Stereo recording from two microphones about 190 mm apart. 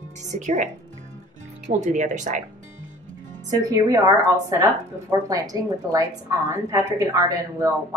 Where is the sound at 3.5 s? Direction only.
20° right (ahead or behind).